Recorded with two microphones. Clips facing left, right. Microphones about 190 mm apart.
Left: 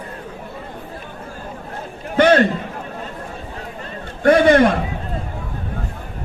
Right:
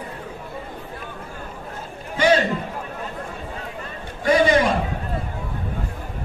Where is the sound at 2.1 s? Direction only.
60° left (ahead or behind).